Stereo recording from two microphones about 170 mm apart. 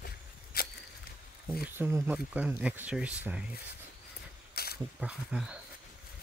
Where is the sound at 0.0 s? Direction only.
65° left (ahead or behind).